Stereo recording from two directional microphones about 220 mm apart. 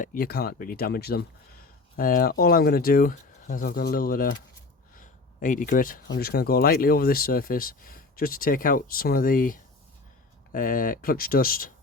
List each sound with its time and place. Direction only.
0.0 s speech: 40° left (ahead or behind)
4.9 s a sound: 35° left (ahead or behind)
6.1 s speech: 45° left (ahead or behind)